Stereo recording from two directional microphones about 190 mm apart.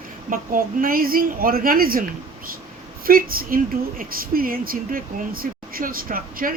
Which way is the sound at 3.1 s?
50° right (ahead or behind).